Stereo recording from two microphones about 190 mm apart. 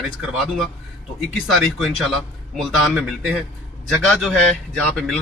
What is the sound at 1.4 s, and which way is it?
Speech, centre (ahead or behind).